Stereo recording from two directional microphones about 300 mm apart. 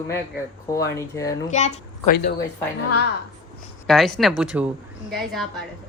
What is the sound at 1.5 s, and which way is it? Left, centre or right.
Speech, left.